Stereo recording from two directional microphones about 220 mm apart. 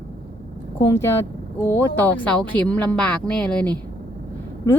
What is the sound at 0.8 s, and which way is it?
Speech, 10° left (ahead or behind).